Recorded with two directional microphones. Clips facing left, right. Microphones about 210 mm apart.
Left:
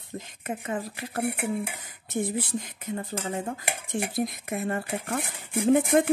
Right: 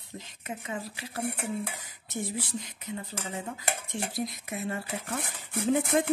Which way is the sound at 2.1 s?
55° left (ahead or behind).